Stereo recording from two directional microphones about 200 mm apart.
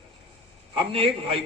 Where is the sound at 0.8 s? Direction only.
30° right (ahead or behind).